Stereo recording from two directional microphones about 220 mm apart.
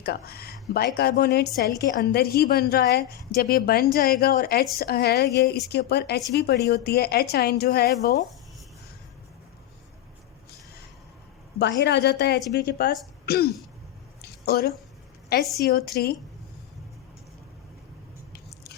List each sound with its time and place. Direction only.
0.0 s a woman's voice: 45° left (ahead or behind)
11.6 s a woman's voice: 50° left (ahead or behind)
14.2 s a sound: 45° left (ahead or behind)
15.5 s a woman's voice: 45° left (ahead or behind)